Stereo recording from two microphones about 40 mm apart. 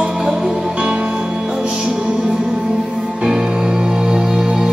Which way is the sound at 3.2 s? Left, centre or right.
Centre.